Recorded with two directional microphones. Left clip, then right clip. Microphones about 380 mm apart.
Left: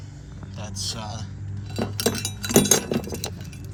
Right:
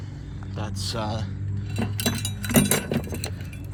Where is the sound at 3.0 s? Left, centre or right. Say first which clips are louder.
Left 1 dB; centre.